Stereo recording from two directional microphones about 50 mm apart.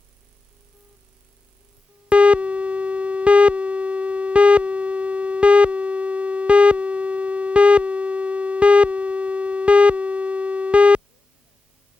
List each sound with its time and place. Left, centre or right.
2.0 s busy signal: right